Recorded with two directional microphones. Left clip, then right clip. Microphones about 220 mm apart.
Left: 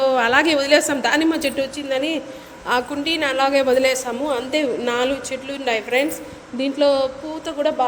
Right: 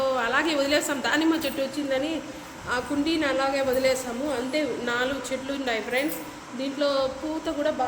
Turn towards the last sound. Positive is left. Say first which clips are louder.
# left 5 dB
turn(degrees=30)  # may be behind; listen again after turning